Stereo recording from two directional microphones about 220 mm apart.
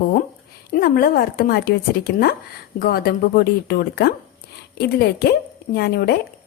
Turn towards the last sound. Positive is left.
turn(degrees=45)  # may be behind; listen again after turning